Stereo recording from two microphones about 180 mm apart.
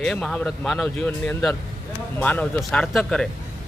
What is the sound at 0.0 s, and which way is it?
Speech, centre (ahead or behind).